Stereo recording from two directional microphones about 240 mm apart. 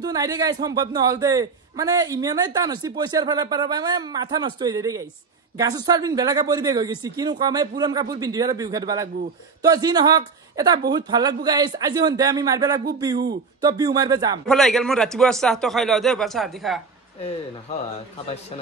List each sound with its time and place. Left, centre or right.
0.0 s speech: centre
14.5 s a man's voice: centre